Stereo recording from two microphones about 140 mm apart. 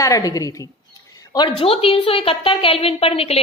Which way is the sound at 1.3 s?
40° left (ahead or behind).